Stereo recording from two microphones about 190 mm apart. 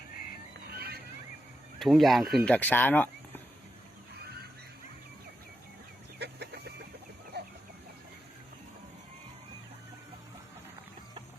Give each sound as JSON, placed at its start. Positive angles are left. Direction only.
{"t": 0.7, "sound": "a sound", "side_deg": -55}
{"t": 1.8, "sound": "speech", "side_deg": 0}
{"t": 6.1, "sound": "chicken", "side_deg": -60}